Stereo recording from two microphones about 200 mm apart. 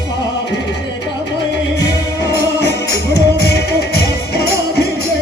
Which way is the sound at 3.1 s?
55° left (ahead or behind).